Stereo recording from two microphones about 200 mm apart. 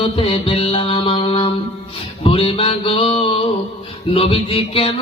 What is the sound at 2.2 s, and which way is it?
Mantra, 30° left (ahead or behind).